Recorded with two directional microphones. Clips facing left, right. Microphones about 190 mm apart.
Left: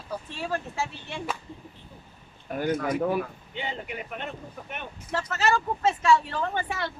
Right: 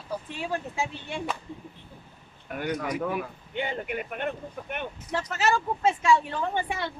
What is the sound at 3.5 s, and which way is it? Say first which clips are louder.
Speech: right 4 dB; 55° right (ahead or behind).